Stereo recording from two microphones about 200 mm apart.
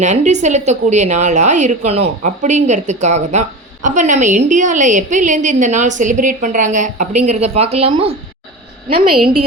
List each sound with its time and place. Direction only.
0.0 s a woman's voice: 35° right (ahead or behind)